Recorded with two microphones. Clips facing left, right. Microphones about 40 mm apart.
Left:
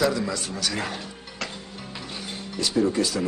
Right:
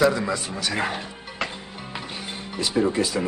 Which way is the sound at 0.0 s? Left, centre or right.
Centre.